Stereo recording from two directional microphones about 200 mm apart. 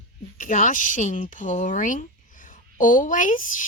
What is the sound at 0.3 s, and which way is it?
A woman's voice, 40° left (ahead or behind).